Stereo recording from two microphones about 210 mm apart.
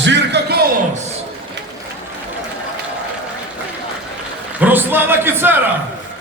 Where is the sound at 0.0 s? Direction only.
55° right (ahead or behind).